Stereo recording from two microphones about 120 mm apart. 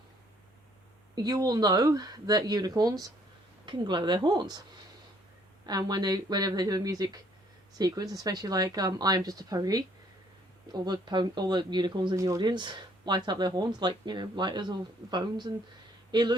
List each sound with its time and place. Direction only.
1.1 s speech: 30° right (ahead or behind)
5.6 s speech: 35° right (ahead or behind)
12.1 s speech: 25° right (ahead or behind)
12.4 s speech: 40° right (ahead or behind)